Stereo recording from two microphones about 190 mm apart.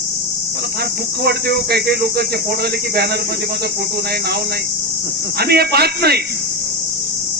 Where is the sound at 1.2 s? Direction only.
55° right (ahead or behind).